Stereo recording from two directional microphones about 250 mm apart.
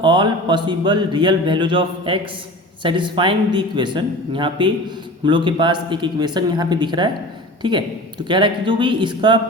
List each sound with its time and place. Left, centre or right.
0.0 s speech: centre